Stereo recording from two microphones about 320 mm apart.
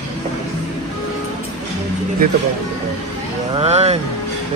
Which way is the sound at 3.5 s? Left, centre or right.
Centre.